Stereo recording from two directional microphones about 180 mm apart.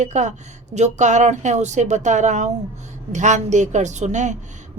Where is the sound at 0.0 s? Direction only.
40° right (ahead or behind).